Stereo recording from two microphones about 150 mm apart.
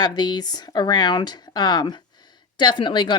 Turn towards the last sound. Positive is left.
turn(degrees=30)  # may be behind; listen again after turning